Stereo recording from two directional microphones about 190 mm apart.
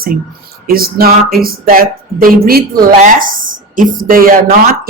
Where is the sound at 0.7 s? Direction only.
50° right (ahead or behind).